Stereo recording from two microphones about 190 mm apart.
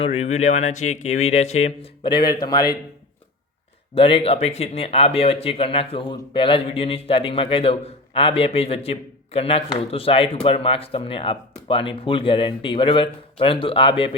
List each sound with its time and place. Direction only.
0.0 s speech: 30° left (ahead or behind)
3.9 s speech: 30° left (ahead or behind)